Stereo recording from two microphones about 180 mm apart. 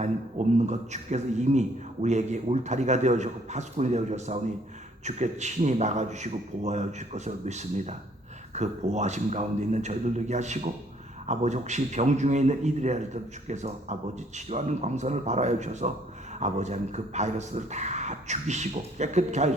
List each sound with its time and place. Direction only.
0.0 s a man's voice: 40° right (ahead or behind)